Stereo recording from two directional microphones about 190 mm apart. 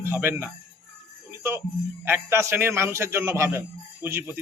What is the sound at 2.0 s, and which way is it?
A man's voice, 10° right (ahead or behind).